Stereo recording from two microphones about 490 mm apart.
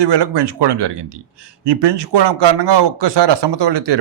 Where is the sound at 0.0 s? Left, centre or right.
Right.